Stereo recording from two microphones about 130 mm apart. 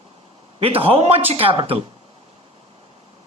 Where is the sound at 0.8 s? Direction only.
50° right (ahead or behind).